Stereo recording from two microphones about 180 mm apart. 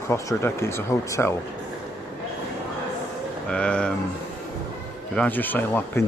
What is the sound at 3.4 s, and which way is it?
Speech, 5° left (ahead or behind).